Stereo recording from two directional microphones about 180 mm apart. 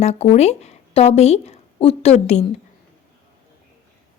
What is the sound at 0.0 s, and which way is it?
A woman's voice, 35° left (ahead or behind).